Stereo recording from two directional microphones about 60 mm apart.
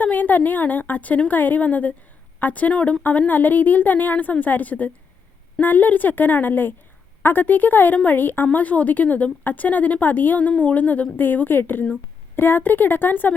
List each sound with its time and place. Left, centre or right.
0.0 s a woman's voice: left